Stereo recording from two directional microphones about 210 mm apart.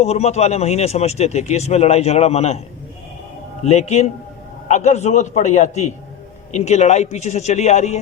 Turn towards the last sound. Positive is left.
turn(degrees=35)  # may be behind; listen again after turning